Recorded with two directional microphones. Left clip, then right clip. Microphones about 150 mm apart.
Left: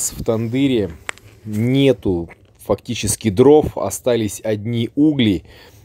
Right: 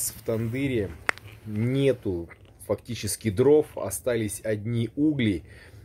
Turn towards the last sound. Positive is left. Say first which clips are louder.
# left 9 dB
turn(degrees=45)  # may be behind; listen again after turning